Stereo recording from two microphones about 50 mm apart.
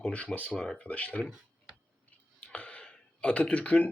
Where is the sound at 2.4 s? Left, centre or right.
Left.